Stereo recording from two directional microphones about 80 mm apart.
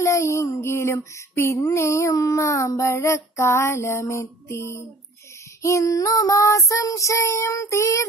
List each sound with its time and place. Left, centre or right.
0.0 s child singing: left